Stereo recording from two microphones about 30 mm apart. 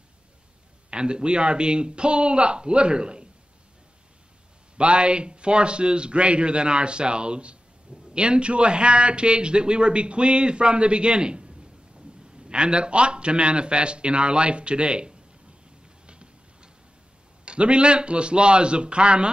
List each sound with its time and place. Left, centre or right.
0.8 s a man's voice: right
4.7 s a man's voice: right
16.1 s a sound: right
17.5 s a man's voice: right